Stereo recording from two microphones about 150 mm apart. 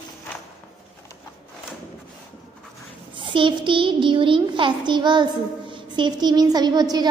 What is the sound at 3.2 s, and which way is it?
A child's voice, 35° right (ahead or behind).